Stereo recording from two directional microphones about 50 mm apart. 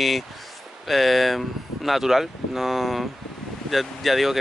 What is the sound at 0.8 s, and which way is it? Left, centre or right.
Speech, centre.